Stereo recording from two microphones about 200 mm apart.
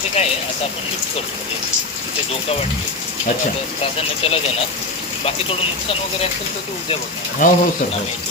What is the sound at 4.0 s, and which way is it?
Speech, 30° left (ahead or behind).